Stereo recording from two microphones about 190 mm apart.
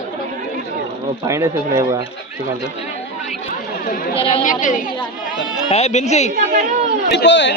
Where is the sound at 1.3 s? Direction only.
15° right (ahead or behind).